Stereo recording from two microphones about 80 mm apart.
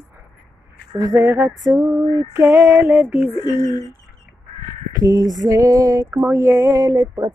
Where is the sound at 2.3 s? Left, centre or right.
Right.